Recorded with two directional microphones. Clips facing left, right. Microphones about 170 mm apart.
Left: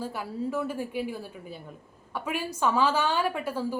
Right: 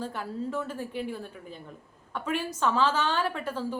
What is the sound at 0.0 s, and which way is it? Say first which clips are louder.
A woman's voice: left 1 dB; 10° left (ahead or behind).